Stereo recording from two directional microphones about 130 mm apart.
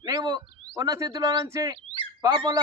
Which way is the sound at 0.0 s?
30° right (ahead or behind).